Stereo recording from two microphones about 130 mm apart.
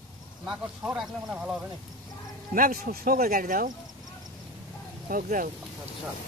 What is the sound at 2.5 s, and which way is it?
Speech, 90° right.